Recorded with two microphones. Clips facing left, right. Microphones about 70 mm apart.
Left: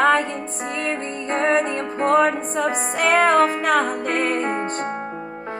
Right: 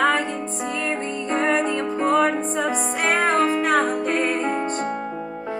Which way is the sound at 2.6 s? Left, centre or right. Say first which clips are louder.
Left 4 dB; left.